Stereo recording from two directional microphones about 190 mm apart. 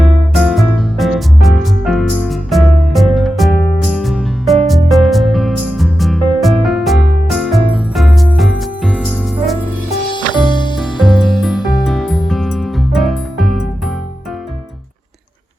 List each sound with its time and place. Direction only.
0.0 s music: centre (ahead or behind)
10.1 s music: 25° left (ahead or behind)
10.8 s music: centre (ahead or behind)